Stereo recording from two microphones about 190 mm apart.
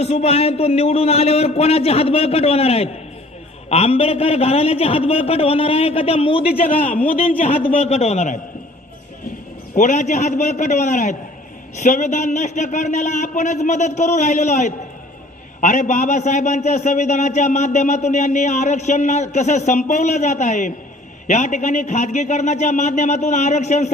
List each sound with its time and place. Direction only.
0.0 s a man's voice: 35° left (ahead or behind)
9.7 s a man's voice: 40° left (ahead or behind)